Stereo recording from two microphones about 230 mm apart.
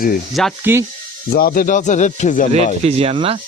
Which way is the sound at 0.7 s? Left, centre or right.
Centre.